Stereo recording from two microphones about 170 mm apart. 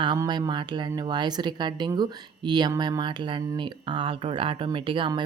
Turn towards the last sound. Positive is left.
turn(degrees=-30)  # may be behind; listen again after turning